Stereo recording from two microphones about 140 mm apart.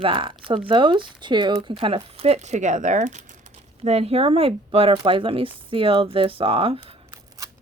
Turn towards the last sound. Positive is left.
turn(degrees=-40)  # may be behind; listen again after turning